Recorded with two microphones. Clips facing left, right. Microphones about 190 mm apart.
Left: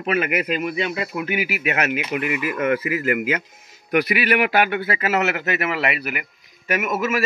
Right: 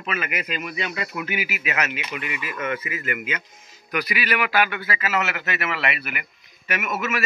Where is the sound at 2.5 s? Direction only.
70° left (ahead or behind).